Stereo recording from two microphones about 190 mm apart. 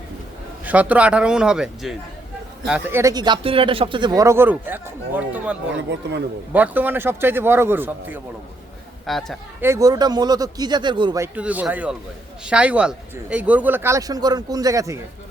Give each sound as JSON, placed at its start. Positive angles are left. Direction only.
{"t": 0.6, "sound": "a man's voice", "side_deg": -10}
{"t": 5.7, "sound": "speech", "side_deg": -70}
{"t": 6.5, "sound": "speech", "side_deg": -10}
{"t": 9.0, "sound": "a man's voice", "side_deg": 0}
{"t": 9.6, "sound": "speech", "side_deg": -15}
{"t": 11.3, "sound": "speech", "side_deg": -5}